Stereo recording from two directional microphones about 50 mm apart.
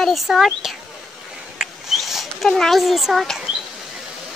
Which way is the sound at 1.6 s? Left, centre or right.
Centre.